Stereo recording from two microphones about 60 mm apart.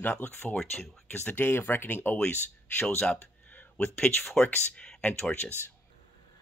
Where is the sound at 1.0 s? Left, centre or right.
Left.